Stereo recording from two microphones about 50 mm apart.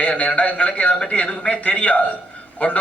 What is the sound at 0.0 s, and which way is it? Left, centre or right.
A man's voice, left.